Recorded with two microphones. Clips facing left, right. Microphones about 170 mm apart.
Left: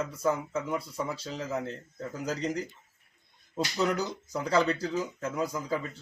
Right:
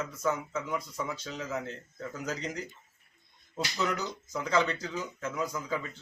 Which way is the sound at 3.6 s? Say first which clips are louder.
Left 4 dB; 35° left (ahead or behind).